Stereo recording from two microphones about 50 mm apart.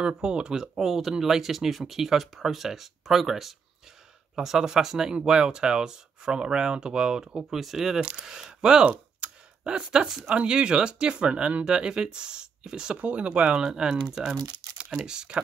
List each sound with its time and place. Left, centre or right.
0.0 s speech: centre
0.7 s speech: centre
12.9 s speech: right